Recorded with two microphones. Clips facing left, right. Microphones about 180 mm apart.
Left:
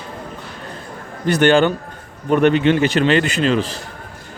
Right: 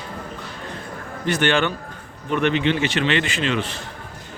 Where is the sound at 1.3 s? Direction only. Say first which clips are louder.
Left 7 dB; 35° left (ahead or behind).